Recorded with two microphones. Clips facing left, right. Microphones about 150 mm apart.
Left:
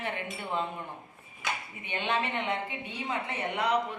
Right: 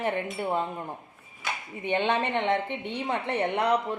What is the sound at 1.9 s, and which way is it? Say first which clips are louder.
A woman's voice: right 6 dB; 60° right (ahead or behind).